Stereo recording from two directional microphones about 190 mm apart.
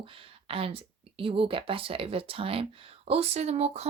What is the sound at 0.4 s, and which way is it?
Speech, 30° right (ahead or behind).